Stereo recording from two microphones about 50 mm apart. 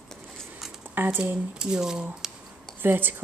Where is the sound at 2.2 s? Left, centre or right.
Centre.